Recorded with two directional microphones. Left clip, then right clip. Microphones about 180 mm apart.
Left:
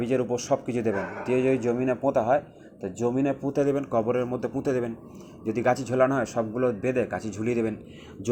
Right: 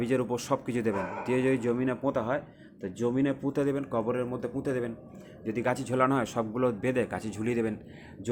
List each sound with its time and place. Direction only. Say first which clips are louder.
0.0 s speech: left 3 dB; 10° right (ahead or behind)